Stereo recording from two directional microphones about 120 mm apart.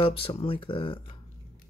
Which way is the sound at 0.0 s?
50° left (ahead or behind).